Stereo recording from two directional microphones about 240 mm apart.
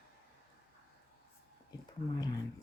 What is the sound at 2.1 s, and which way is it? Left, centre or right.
Speech, centre.